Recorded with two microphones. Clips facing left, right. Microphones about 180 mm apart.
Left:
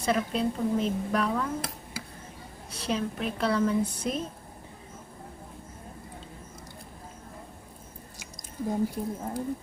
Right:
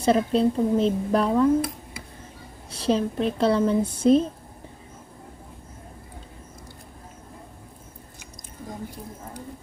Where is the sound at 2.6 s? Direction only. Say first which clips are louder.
Right 7 dB; 30° right (ahead or behind).